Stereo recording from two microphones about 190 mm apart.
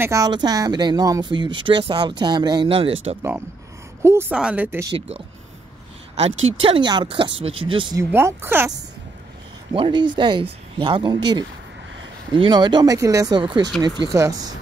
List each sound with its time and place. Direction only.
0.0 s speech: 15° right (ahead or behind)
3.2 s speech: 15° right (ahead or behind)
4.9 s speech: 30° right (ahead or behind)
6.4 s speech: 30° right (ahead or behind)
8.0 s speech: 15° right (ahead or behind)
9.7 s speech: 25° right (ahead or behind)
12.4 s speech: 25° right (ahead or behind)